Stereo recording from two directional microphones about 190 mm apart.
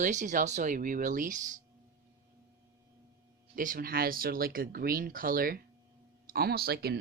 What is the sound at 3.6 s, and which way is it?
Speech, 50° right (ahead or behind).